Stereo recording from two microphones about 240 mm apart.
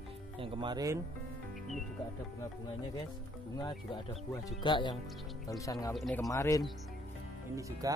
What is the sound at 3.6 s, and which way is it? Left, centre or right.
Speech, centre.